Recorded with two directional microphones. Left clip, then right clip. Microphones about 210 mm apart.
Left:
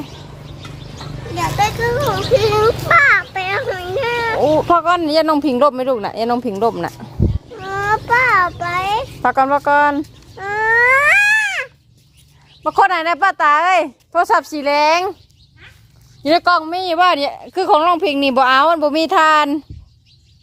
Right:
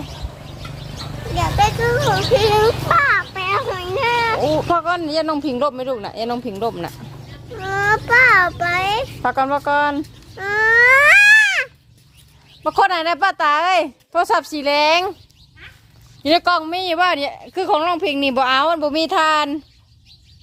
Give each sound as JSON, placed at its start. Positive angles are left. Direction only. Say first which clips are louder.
{"t": 1.4, "sound": "a child's voice", "louder": "even", "side_deg": -10}
{"t": 2.3, "sound": "fowl", "louder": "left 1 dB", "side_deg": -15}
{"t": 2.9, "sound": "children playing", "louder": "left 6 dB", "side_deg": 0}
{"t": 3.4, "sound": "a sound", "louder": "even", "side_deg": -20}
{"t": 4.4, "sound": "speech", "louder": "left 5 dB", "side_deg": 30}
{"t": 7.5, "sound": "a sound", "louder": "right 1 dB", "side_deg": -30}
{"t": 9.2, "sound": "speech", "louder": "left 5 dB", "side_deg": 30}
{"t": 10.3, "sound": "a sound", "louder": "right 1 dB", "side_deg": -35}
{"t": 12.8, "sound": "speech", "louder": "left 3 dB", "side_deg": 0}
{"t": 13.1, "sound": "speech", "louder": "left 3 dB", "side_deg": 15}
{"t": 16.2, "sound": "speech", "louder": "left 2 dB", "side_deg": 15}
{"t": 17.1, "sound": "speech", "louder": "left 4 dB", "side_deg": 30}